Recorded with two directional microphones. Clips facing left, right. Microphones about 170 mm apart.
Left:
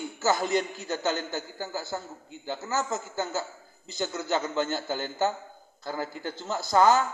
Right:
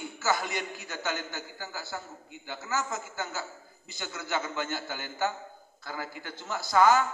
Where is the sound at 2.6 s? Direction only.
40° left (ahead or behind).